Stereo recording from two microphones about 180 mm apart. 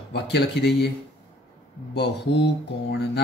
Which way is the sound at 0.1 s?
70° left (ahead or behind).